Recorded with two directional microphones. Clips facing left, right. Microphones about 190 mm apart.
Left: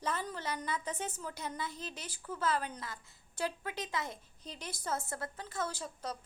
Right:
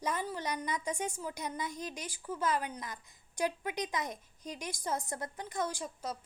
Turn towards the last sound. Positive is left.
turn(degrees=-15)  # may be behind; listen again after turning